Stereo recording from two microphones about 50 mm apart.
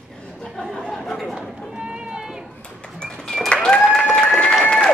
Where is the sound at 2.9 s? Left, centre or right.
Centre.